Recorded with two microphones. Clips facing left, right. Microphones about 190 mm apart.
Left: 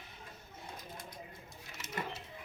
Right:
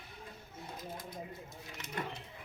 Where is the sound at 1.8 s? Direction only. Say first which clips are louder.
Even; 5° left (ahead or behind).